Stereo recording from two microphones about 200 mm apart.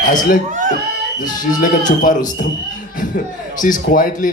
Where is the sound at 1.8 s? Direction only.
40° left (ahead or behind).